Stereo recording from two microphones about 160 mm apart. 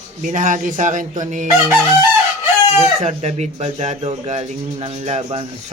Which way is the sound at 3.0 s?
45° right (ahead or behind).